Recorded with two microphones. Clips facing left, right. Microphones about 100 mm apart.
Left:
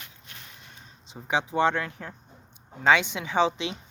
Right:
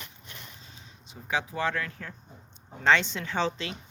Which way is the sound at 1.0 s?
25° left (ahead or behind).